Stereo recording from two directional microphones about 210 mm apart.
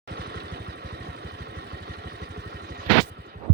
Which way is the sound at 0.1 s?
50° right (ahead or behind).